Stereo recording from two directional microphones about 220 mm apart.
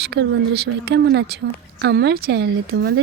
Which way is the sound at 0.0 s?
50° right (ahead or behind).